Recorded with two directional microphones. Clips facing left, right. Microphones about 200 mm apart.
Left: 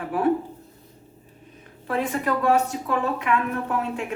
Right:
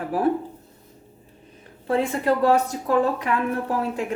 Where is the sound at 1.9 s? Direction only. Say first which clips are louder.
Right 3 dB; 30° right (ahead or behind).